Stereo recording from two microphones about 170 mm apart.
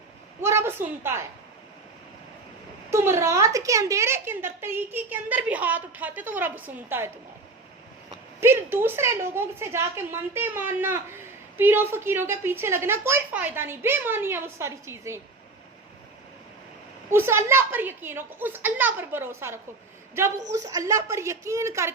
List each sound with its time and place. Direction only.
0.4 s a woman's voice: 15° right (ahead or behind)
2.9 s a woman's voice: 15° right (ahead or behind)
8.1 s a woman's voice: 15° right (ahead or behind)
17.1 s a woman's voice: 15° right (ahead or behind)